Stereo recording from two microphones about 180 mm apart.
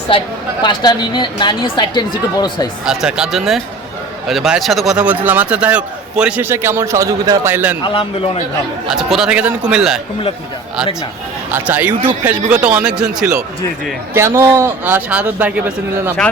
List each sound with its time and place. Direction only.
0.6 s speech: 25° left (ahead or behind)
2.8 s a man's voice: 5° right (ahead or behind)
7.9 s speech: 30° left (ahead or behind)
8.9 s speech: centre (ahead or behind)
11.5 s a man's voice: 10° right (ahead or behind)